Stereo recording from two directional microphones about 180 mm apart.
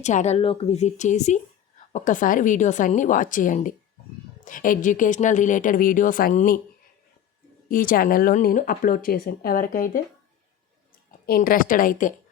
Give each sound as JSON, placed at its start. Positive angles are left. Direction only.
{"t": 0.0, "sound": "a woman's voice", "side_deg": 40}
{"t": 7.7, "sound": "speech", "side_deg": 50}
{"t": 11.3, "sound": "speech", "side_deg": 55}